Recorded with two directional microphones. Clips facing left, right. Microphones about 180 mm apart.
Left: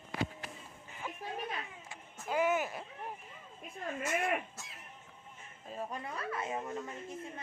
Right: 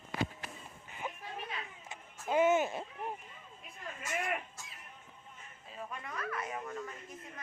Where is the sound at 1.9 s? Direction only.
20° right (ahead or behind).